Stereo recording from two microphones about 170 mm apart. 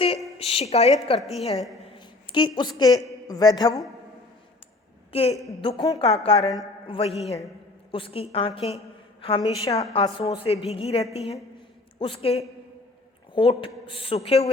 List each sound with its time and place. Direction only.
0.3 s a woman's voice: 35° left (ahead or behind)
1.2 s a woman's voice: centre (ahead or behind)
1.9 s a man's voice: 30° left (ahead or behind)
5.1 s a woman's voice: 35° left (ahead or behind)
6.2 s a woman's voice: 35° left (ahead or behind)